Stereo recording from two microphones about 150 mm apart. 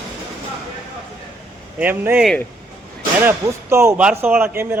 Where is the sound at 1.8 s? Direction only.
10° right (ahead or behind).